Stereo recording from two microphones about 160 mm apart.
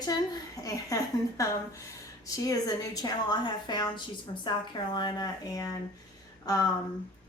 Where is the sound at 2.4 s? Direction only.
25° left (ahead or behind).